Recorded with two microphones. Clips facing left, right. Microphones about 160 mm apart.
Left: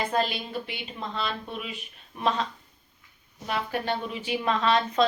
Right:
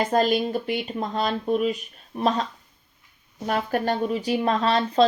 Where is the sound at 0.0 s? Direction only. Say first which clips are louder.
Right 7 dB; 45° right (ahead or behind).